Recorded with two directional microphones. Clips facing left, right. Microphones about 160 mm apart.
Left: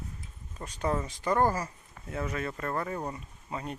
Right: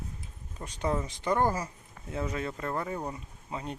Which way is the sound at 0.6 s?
15° right (ahead or behind).